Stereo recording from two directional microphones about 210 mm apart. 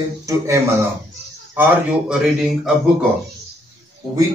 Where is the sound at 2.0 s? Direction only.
Centre (ahead or behind).